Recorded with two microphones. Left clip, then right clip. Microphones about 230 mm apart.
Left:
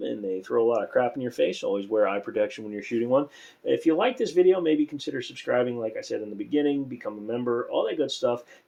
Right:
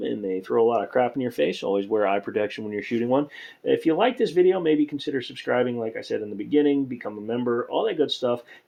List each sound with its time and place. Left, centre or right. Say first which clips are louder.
0.0 s speech: right 2 dB; right